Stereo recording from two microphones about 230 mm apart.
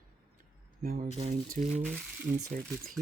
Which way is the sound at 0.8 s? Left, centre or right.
Right.